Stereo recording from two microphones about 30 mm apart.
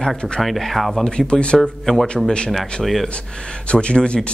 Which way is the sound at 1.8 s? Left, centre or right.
Centre.